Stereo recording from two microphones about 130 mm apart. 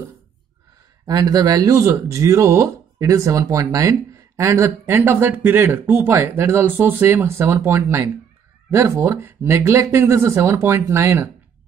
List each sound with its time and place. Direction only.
1.0 s speech: 30° right (ahead or behind)